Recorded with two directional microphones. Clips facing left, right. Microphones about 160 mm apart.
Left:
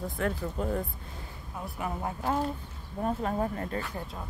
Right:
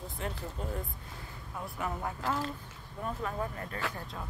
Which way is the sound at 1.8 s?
20° left (ahead or behind).